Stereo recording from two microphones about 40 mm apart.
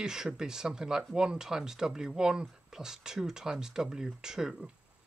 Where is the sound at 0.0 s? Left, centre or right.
Centre.